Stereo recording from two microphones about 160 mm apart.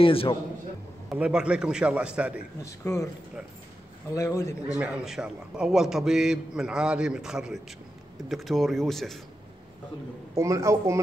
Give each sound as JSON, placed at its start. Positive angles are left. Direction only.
{"t": 0.0, "sound": "a man's voice", "side_deg": 35}
{"t": 1.1, "sound": "a man's voice", "side_deg": -5}
{"t": 2.6, "sound": "a man's voice", "side_deg": 20}
{"t": 4.1, "sound": "a man's voice", "side_deg": 20}
{"t": 4.7, "sound": "a man's voice", "side_deg": -5}
{"t": 10.3, "sound": "a man's voice", "side_deg": -20}